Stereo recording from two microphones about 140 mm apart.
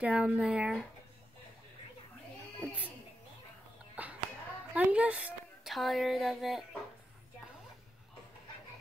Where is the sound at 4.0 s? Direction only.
10° right (ahead or behind).